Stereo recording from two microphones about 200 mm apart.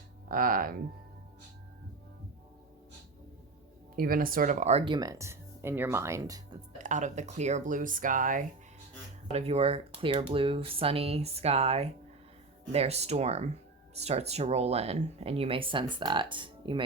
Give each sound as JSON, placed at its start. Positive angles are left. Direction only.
{"t": 0.3, "sound": "speech", "side_deg": -45}
{"t": 3.9, "sound": "speech", "side_deg": -45}
{"t": 4.9, "sound": "speech", "side_deg": -15}
{"t": 6.8, "sound": "speech", "side_deg": -35}
{"t": 9.3, "sound": "speech", "side_deg": -30}